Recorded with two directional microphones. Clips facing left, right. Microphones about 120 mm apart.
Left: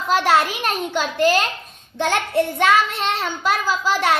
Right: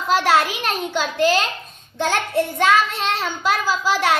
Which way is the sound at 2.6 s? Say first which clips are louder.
Right 2 dB; centre (ahead or behind).